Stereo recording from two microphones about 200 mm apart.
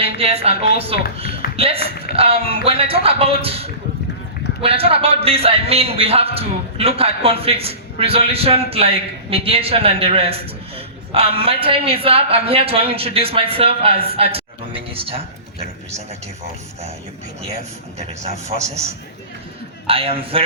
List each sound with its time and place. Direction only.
0.0 s a man's voice: 30° right (ahead or behind)
17.9 s a man's voice: 35° right (ahead or behind)
19.9 s a man's voice: 30° right (ahead or behind)